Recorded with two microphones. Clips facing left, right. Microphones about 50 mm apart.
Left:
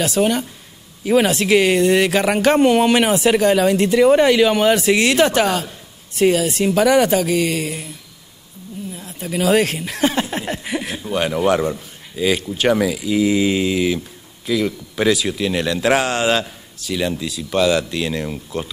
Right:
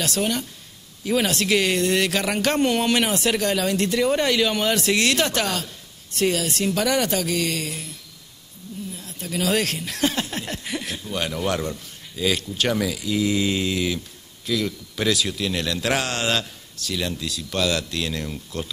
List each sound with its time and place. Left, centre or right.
0.0 s speech: centre
8.9 s speech: centre